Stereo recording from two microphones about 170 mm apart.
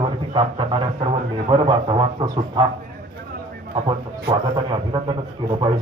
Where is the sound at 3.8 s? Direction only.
30° right (ahead or behind).